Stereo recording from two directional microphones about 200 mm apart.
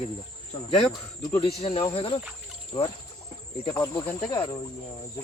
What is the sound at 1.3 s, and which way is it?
Speech, 30° left (ahead or behind).